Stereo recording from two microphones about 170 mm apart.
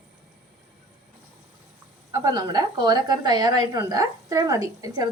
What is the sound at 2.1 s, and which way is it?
A woman's voice, 20° right (ahead or behind).